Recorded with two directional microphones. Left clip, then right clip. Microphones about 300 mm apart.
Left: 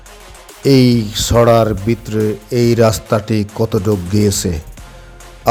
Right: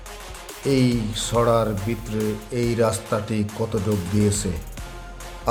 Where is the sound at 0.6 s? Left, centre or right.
Left.